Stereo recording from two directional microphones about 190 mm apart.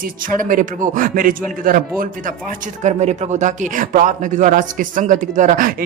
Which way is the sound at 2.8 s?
35° right (ahead or behind).